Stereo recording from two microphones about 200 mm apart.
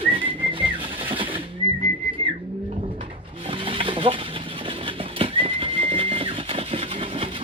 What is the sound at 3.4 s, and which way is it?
Vehicle, 25° right (ahead or behind).